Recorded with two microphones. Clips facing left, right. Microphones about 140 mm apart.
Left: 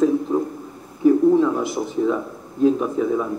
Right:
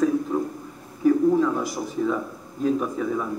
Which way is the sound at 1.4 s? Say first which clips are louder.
Left 3 dB; 15° left (ahead or behind).